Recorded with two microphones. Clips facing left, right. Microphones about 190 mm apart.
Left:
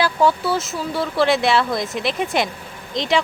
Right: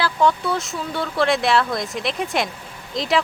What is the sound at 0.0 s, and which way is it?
Speech, 10° left (ahead or behind).